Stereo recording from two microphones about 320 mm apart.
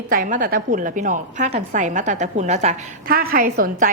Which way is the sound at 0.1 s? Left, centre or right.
Right.